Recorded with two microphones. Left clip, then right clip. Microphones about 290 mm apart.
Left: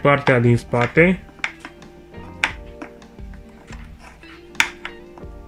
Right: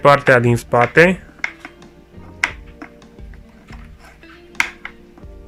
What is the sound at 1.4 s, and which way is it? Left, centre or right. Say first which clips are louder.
Finger snapping: right 2 dB; centre.